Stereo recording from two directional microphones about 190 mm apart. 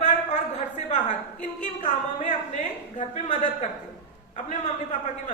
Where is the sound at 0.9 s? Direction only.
40° left (ahead or behind).